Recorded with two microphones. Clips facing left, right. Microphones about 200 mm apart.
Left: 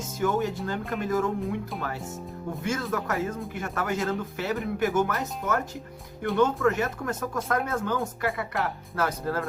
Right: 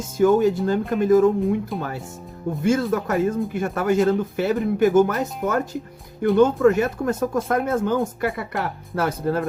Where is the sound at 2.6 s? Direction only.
30° right (ahead or behind).